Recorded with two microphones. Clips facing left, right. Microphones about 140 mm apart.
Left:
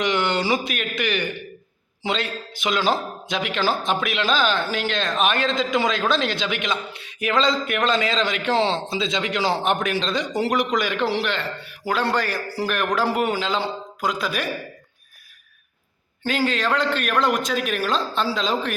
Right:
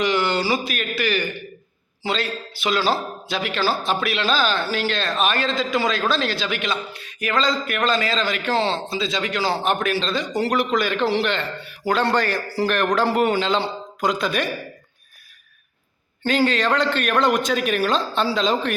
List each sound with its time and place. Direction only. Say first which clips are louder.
0.0 s a man's voice: right 1 dB; 20° left (ahead or behind); by 14.5 s centre (ahead or behind)
16.2 s a man's voice: right 3 dB; 5° left (ahead or behind)